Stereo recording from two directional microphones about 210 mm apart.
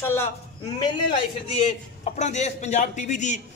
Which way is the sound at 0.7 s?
25° left (ahead or behind).